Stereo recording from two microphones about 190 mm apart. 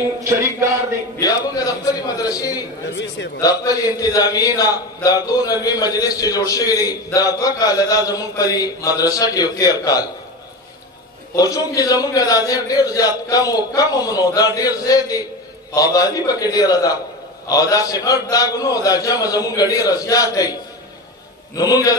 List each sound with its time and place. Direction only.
0.2 s a sound: 15° right (ahead or behind)
1.1 s a sound: 20° left (ahead or behind)
2.9 s a man's voice: 65° left (ahead or behind)
3.3 s speech: 20° left (ahead or behind)
11.3 s speech: 20° left (ahead or behind)
21.5 s speech: 20° left (ahead or behind)